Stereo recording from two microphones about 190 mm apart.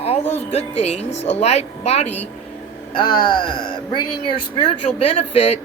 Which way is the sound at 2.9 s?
25° left (ahead or behind).